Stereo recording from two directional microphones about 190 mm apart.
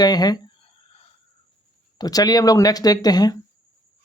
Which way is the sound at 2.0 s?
20° left (ahead or behind).